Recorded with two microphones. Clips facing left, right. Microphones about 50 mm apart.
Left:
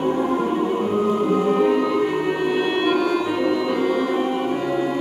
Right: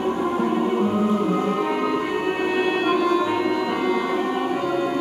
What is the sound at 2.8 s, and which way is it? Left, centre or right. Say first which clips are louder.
Music: even; left.